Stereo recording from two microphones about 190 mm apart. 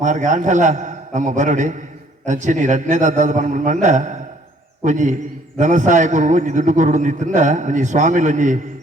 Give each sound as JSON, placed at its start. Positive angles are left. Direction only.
{"t": 0.0, "sound": "a man's voice", "side_deg": -40}